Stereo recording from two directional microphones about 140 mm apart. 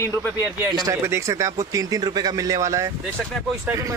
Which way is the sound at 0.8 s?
20° right (ahead or behind).